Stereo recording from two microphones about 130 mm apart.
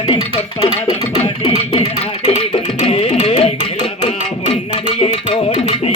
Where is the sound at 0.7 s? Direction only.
50° right (ahead or behind).